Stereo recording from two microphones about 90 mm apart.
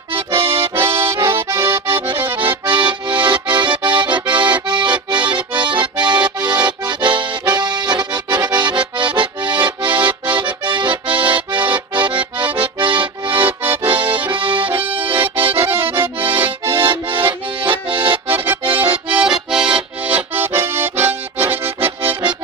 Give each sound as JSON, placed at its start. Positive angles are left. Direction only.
{"t": 0.3, "sound": "accordion", "side_deg": -90}
{"t": 0.6, "sound": "accordion", "side_deg": -25}
{"t": 2.6, "sound": "accordion", "side_deg": -60}
{"t": 13.3, "sound": "accordion", "side_deg": -20}
{"t": 15.2, "sound": "accordion", "side_deg": -85}
{"t": 15.6, "sound": "accordion", "side_deg": -25}
{"t": 17.3, "sound": "accordion", "side_deg": -70}
{"t": 18.4, "sound": "accordion", "side_deg": -20}
{"t": 19.0, "sound": "accordion", "side_deg": -10}